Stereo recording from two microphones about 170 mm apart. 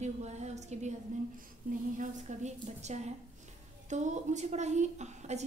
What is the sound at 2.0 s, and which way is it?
A woman's voice, 45° right (ahead or behind).